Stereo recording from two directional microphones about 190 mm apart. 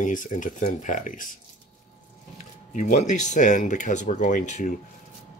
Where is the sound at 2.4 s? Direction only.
40° left (ahead or behind).